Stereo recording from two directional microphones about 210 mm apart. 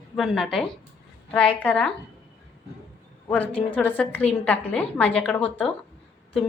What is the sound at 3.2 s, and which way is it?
A woman's voice, 5° left (ahead or behind).